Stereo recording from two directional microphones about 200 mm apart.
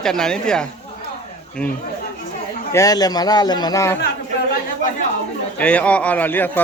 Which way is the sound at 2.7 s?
15° left (ahead or behind).